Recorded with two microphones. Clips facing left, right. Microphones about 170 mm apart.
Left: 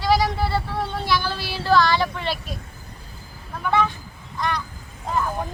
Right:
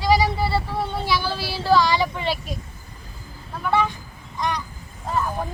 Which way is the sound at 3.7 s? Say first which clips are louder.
Even; 10° right (ahead or behind).